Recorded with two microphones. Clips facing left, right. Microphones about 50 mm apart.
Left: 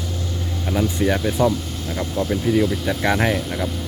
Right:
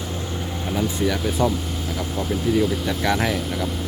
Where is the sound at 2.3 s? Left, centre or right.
Centre.